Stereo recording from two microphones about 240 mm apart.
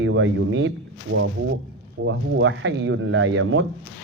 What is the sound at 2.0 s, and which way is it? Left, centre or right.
Speech, right.